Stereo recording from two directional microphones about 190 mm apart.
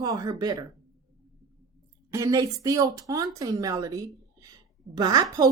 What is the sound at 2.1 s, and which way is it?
A woman's voice, 15° right (ahead or behind).